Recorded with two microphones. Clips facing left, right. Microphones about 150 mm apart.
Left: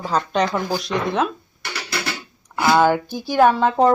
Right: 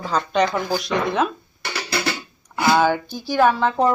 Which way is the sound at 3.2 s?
15° left (ahead or behind).